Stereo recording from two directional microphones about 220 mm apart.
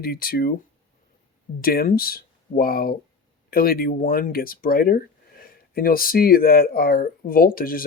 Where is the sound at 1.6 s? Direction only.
40° left (ahead or behind).